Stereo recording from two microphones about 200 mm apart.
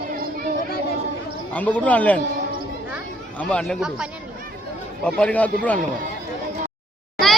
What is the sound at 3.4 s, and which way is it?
A man's voice, 5° left (ahead or behind).